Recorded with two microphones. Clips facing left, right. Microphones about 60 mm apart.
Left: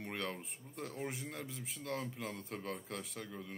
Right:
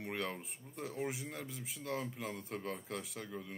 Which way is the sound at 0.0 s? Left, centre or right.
Centre.